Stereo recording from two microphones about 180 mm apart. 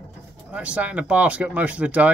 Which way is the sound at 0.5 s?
5° right (ahead or behind).